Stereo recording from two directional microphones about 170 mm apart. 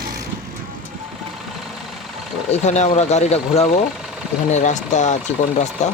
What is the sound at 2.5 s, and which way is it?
Speech, 40° left (ahead or behind).